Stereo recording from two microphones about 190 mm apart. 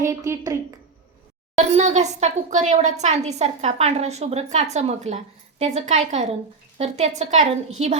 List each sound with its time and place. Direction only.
0.0 s speech: 15° right (ahead or behind)
1.5 s speech: 35° right (ahead or behind)